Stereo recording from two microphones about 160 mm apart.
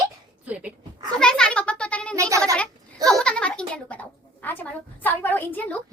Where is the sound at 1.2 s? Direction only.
5° left (ahead or behind).